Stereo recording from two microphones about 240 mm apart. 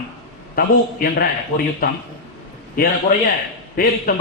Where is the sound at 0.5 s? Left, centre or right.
Left.